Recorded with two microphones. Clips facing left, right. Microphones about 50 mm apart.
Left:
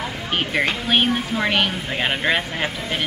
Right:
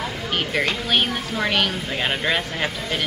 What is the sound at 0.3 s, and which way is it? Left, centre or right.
A woman's voice, centre.